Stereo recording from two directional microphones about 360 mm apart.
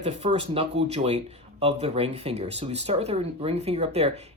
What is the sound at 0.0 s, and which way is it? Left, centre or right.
Speech, centre.